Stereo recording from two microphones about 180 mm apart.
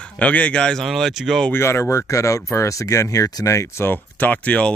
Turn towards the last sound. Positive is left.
turn(degrees=10)  # may be behind; listen again after turning